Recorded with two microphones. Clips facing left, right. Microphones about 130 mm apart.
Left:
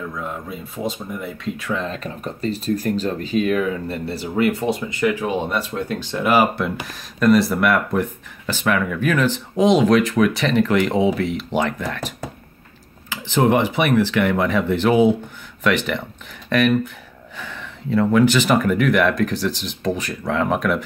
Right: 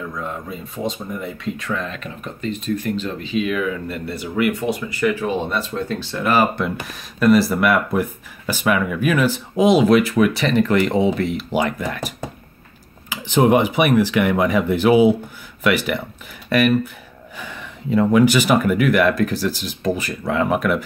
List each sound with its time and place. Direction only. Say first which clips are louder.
0.1 s speech: right 1 dB; 5° left (ahead or behind)
1.9 s speech: left 3 dB; 35° left (ahead or behind); by 6.6 s 15° left (ahead or behind)
6.6 s speech: even; centre (ahead or behind)
13.1 s speech: right 2 dB; 15° right (ahead or behind)